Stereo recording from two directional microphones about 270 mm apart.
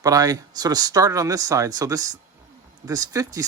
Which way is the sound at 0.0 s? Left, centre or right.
Centre.